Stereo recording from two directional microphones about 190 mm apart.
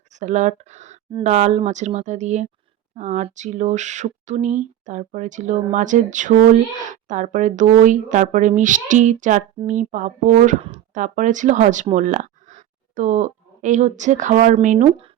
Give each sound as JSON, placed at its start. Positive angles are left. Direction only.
{"t": 0.1, "sound": "speech", "side_deg": -40}